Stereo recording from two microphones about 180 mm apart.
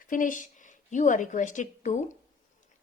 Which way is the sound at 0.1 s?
45° left (ahead or behind).